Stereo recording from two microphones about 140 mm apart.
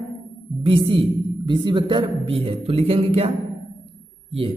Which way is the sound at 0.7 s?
40° right (ahead or behind).